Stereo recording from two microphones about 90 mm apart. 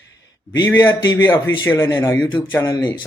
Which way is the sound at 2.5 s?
45° left (ahead or behind).